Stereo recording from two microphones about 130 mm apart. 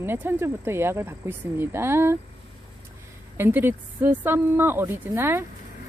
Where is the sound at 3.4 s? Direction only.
15° right (ahead or behind).